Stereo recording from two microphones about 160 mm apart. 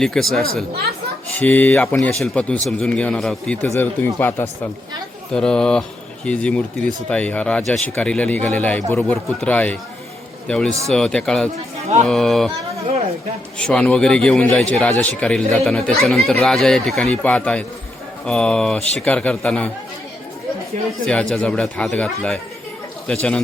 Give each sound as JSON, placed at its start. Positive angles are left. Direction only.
{"t": 0.0, "sound": "speech", "side_deg": 0}
{"t": 0.4, "sound": "speech", "side_deg": -65}
{"t": 1.3, "sound": "speech", "side_deg": 10}
{"t": 10.8, "sound": "speech", "side_deg": 5}
{"t": 11.5, "sound": "speech", "side_deg": -40}
{"t": 12.0, "sound": "speech", "side_deg": 0}
{"t": 13.6, "sound": "speech", "side_deg": 5}
{"t": 21.1, "sound": "speech", "side_deg": 5}